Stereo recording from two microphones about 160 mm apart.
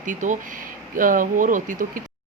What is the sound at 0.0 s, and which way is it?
Speech, 55° right (ahead or behind).